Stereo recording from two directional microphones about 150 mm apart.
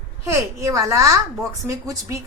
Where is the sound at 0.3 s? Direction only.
20° right (ahead or behind).